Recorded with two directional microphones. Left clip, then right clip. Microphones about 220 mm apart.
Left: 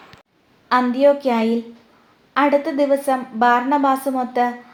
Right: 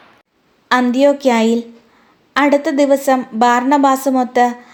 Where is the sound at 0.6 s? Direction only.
50° right (ahead or behind).